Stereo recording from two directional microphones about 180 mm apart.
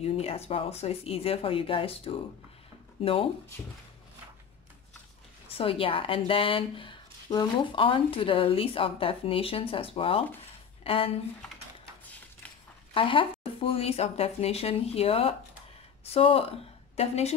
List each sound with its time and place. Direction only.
0.0 s speech: 35° left (ahead or behind)
5.6 s a woman's voice: 30° left (ahead or behind)
12.9 s speech: 30° left (ahead or behind)